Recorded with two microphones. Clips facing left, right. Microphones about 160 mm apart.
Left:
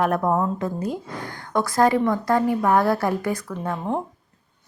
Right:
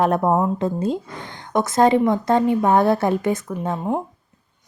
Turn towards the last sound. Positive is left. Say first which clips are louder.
# right 3 dB
turn(degrees=-20)  # may be behind; listen again after turning